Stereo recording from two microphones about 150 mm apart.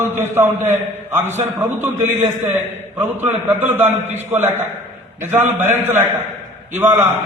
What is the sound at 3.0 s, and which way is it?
Speech, 10° right (ahead or behind).